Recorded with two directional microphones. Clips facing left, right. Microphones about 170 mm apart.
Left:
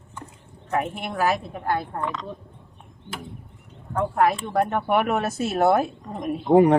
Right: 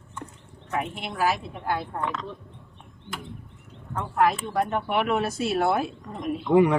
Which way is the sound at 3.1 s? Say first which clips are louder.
Left 1 dB; 40° left (ahead or behind).